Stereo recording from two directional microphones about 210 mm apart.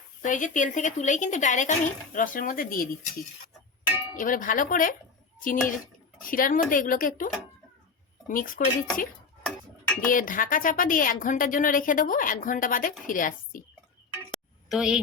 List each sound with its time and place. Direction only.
0.2 s a woman's voice: 40° left (ahead or behind)
4.2 s a woman's voice: 40° left (ahead or behind)
8.3 s a woman's voice: 40° left (ahead or behind)
10.1 s a woman's voice: 40° left (ahead or behind)
14.7 s speech: centre (ahead or behind)